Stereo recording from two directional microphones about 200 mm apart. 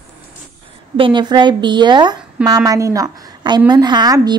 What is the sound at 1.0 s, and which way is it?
A woman's voice, 25° right (ahead or behind).